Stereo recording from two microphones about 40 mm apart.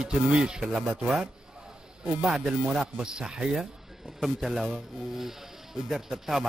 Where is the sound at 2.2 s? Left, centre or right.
Centre.